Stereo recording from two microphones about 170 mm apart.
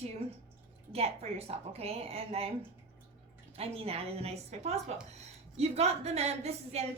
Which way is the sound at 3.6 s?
35° right (ahead or behind).